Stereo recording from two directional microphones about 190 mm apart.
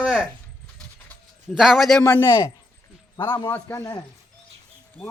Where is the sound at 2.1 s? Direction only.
20° left (ahead or behind).